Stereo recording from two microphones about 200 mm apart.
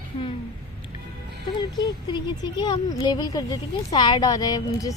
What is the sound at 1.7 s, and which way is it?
A woman's voice, 20° left (ahead or behind).